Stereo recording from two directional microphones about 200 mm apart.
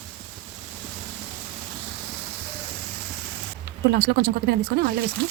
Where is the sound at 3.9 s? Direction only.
55° right (ahead or behind).